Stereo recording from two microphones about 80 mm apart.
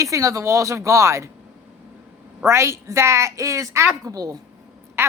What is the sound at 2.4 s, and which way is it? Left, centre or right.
A man's voice, right.